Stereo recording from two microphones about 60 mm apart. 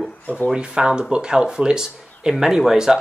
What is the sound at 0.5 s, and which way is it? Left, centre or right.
Speech, centre.